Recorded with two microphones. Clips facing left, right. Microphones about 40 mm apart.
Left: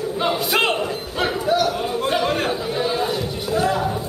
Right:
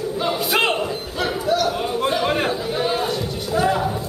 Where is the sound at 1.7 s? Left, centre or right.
Centre.